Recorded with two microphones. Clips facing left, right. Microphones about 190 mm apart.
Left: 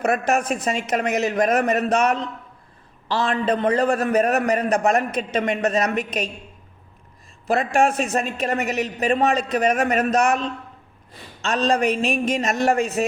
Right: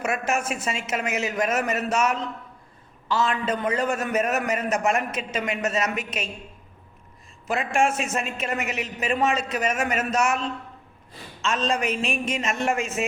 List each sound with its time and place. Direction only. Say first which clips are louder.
0.0 s a man's voice: left 5 dB; 35° left (ahead or behind)
7.4 s a man's voice: left 4 dB; 35° left (ahead or behind)
11.4 s a man's voice: left 5 dB; 35° left (ahead or behind)